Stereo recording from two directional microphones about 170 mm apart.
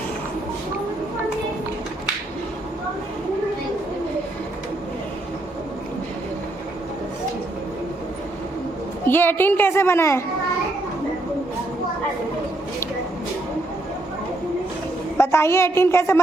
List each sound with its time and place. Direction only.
9.0 s a child's voice: 10° left (ahead or behind)
15.2 s a child's voice: 15° left (ahead or behind)